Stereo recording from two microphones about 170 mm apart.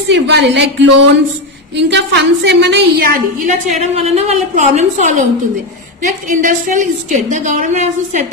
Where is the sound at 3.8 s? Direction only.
40° right (ahead or behind).